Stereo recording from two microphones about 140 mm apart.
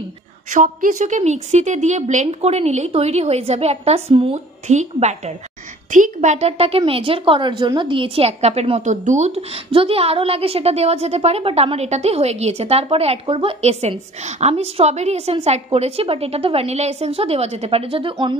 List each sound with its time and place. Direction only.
0.5 s a woman's voice: 75° right (ahead or behind); by 5.3 s 55° right (ahead or behind)
5.9 s a woman's voice: 65° right (ahead or behind); by 18.1 s 40° right (ahead or behind)